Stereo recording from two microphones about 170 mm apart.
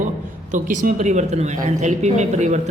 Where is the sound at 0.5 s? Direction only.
50° right (ahead or behind).